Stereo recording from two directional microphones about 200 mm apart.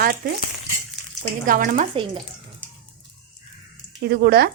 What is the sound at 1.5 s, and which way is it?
Speech, 45° right (ahead or behind).